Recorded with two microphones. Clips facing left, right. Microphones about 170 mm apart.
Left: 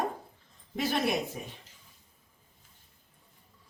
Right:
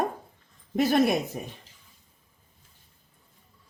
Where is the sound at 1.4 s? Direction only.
45° right (ahead or behind).